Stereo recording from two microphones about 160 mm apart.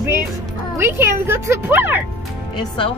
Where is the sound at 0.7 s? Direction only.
15° right (ahead or behind).